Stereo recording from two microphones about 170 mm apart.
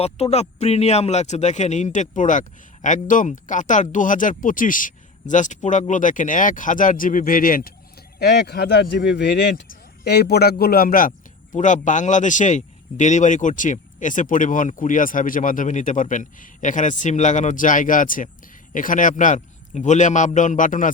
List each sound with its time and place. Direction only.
0.0 s speech: 40° left (ahead or behind); by 7.7 s 55° left (ahead or behind)
8.2 s speech: 75° left (ahead or behind)
10.0 s speech: 75° left (ahead or behind); by 11.1 s 60° left (ahead or behind)
11.5 s speech: 45° left (ahead or behind)